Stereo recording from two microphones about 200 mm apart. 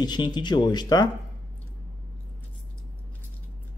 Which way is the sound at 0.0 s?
20° left (ahead or behind).